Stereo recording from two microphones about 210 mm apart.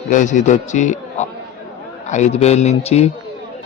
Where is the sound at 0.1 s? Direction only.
35° left (ahead or behind).